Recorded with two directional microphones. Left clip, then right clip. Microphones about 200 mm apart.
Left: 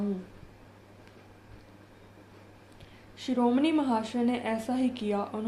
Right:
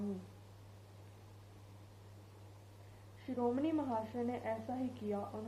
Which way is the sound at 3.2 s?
45° left (ahead or behind).